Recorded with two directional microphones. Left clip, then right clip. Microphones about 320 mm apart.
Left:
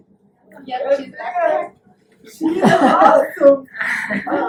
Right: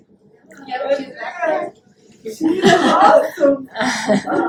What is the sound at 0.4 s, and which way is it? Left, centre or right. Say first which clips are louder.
A woman's voice: left 1 dB; centre.